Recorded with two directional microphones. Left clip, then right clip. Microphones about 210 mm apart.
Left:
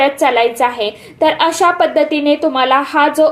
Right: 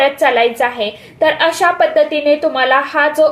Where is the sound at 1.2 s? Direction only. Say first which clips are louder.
Even; 20° left (ahead or behind).